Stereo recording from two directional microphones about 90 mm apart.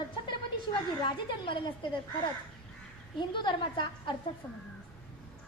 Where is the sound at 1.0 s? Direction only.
60° left (ahead or behind).